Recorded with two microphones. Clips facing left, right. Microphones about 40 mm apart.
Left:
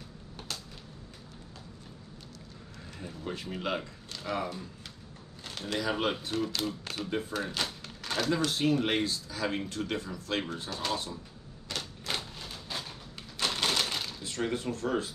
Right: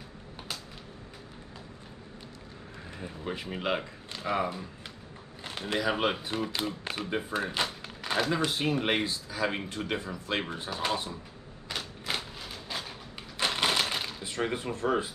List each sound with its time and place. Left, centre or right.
3.0 s speech: centre
11.7 s typewriter: centre